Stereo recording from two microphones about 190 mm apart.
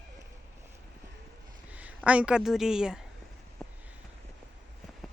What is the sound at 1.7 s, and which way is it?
Speech, 5° right (ahead or behind).